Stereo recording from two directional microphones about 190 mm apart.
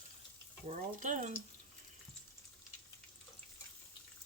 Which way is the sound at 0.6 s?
40° right (ahead or behind).